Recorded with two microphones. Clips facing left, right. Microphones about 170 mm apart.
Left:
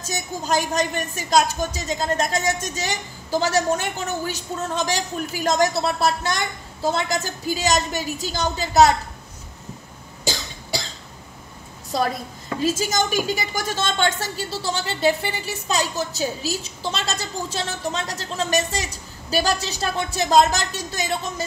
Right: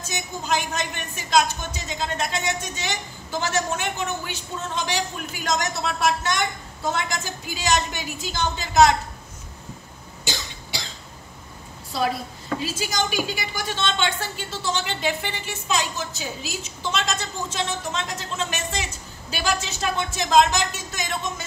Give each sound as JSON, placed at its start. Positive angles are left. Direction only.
{"t": 0.0, "sound": "a woman's voice", "side_deg": 40}
{"t": 12.6, "sound": "a woman's voice", "side_deg": 45}